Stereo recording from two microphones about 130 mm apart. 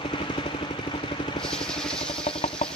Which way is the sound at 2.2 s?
45° left (ahead or behind).